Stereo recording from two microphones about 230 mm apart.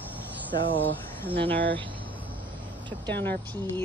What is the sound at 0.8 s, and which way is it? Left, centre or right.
Speech, centre.